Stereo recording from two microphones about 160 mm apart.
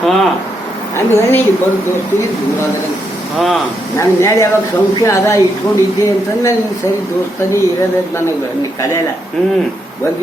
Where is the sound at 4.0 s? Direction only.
20° left (ahead or behind).